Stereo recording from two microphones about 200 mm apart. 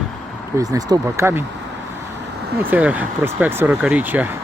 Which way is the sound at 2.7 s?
5° right (ahead or behind).